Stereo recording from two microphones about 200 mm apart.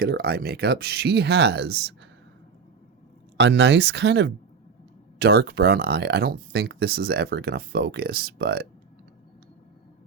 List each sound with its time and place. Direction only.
0.0 s speech: 50° right (ahead or behind)
3.3 s speech: 60° right (ahead or behind)